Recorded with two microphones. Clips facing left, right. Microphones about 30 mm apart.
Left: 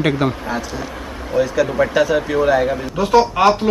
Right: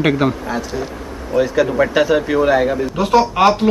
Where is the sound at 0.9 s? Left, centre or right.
Left.